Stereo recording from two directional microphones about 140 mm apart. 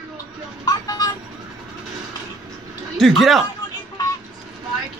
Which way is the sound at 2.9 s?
Centre (ahead or behind).